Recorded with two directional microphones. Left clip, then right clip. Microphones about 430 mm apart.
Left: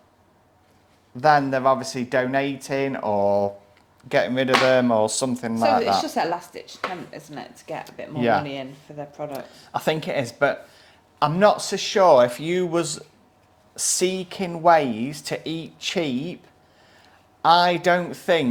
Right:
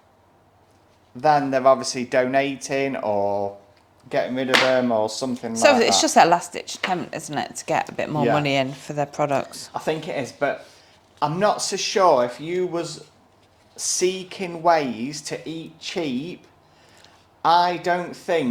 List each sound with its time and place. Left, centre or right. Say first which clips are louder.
1.1 s speech: left 1 dB; left
5.6 s speech: right 4 dB; right
9.7 s speech: left 2 dB; left
17.4 s speech: left 1 dB; left